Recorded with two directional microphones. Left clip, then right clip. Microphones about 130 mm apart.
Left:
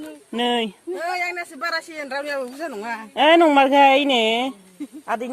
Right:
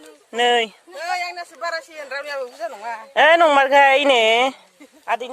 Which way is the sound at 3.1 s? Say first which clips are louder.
Right 1 dB; 90° right.